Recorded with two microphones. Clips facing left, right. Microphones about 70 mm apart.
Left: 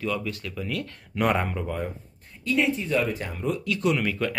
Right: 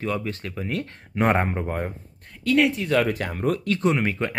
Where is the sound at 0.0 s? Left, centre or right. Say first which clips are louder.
Right 2 dB; right.